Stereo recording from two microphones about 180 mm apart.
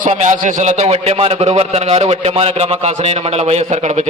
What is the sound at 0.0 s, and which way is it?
A man's voice, 40° right (ahead or behind).